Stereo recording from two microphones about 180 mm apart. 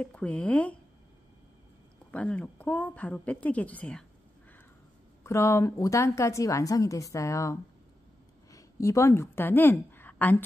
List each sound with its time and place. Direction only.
0.0 s a woman's voice: 5° left (ahead or behind)
2.0 s a woman's voice: 10° left (ahead or behind)
5.2 s a woman's voice: 15° left (ahead or behind)